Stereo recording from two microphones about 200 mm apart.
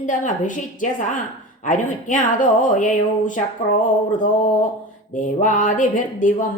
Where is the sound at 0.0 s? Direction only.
40° left (ahead or behind).